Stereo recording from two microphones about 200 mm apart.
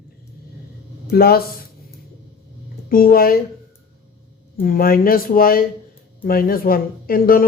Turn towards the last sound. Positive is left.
turn(degrees=45)  # may be behind; listen again after turning